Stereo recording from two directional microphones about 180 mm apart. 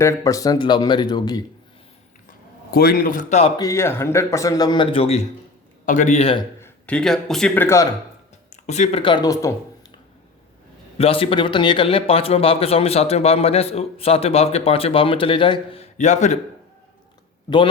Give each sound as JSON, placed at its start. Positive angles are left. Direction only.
{"t": 0.0, "sound": "speech", "side_deg": 15}
{"t": 2.7, "sound": "a man's voice", "side_deg": 55}
{"t": 3.6, "sound": "speech", "side_deg": 15}
{"t": 5.8, "sound": "a man's voice", "side_deg": 45}
{"t": 6.6, "sound": "speech", "side_deg": 5}
{"t": 8.6, "sound": "speech", "side_deg": 40}
{"t": 10.9, "sound": "a man's voice", "side_deg": 30}